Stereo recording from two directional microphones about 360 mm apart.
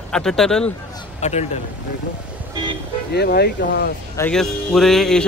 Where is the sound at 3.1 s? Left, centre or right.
Left.